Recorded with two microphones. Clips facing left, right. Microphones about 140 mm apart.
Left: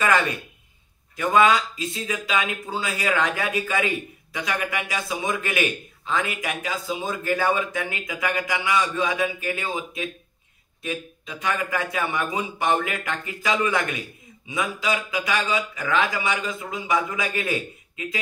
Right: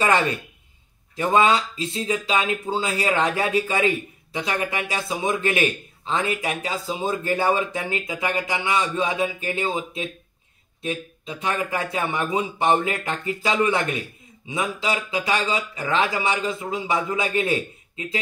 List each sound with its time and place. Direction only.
1.1 s speech: 30° right (ahead or behind)